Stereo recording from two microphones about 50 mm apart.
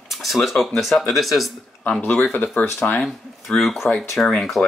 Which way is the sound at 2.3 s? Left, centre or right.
Left.